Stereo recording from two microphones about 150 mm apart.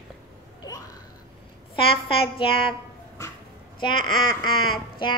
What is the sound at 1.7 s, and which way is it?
A woman's voice, 35° left (ahead or behind).